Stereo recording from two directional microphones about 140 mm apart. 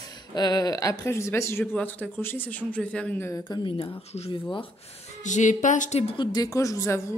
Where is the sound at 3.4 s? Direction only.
35° left (ahead or behind).